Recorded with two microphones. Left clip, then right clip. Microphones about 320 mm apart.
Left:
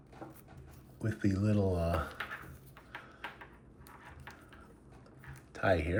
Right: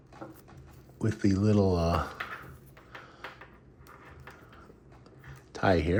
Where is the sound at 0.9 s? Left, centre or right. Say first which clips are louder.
Right 6 dB; centre.